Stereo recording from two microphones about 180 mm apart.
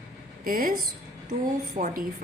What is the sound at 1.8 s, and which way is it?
Speech, 50° right (ahead or behind).